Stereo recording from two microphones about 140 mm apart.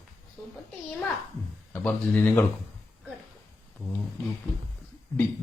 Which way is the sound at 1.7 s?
10° left (ahead or behind).